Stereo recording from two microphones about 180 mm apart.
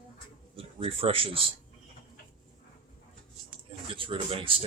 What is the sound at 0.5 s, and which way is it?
Speech, 30° right (ahead or behind).